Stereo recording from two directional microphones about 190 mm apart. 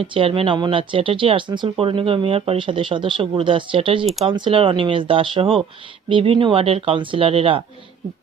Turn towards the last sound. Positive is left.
turn(degrees=-30)  # may be behind; listen again after turning